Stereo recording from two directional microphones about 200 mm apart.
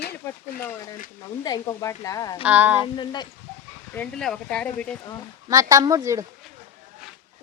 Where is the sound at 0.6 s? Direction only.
15° left (ahead or behind).